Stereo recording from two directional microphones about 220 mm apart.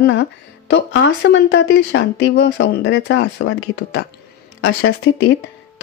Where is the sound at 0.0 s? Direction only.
50° left (ahead or behind).